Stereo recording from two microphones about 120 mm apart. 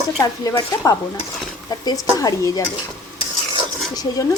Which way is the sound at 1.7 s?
30° left (ahead or behind).